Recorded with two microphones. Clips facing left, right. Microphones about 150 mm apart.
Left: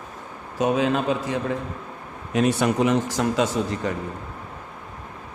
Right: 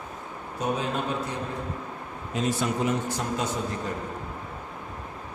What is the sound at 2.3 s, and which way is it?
Speech, 70° left (ahead or behind).